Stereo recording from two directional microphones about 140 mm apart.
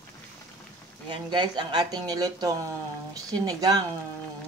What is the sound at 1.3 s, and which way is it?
Speech, 30° right (ahead or behind).